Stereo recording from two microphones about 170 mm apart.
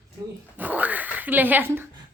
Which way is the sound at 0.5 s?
10° right (ahead or behind).